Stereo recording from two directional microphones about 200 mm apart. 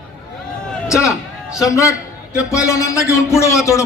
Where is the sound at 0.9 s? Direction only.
15° left (ahead or behind).